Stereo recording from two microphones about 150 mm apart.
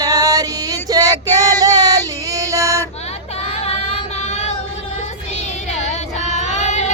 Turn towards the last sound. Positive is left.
turn(degrees=50)  # may be behind; listen again after turning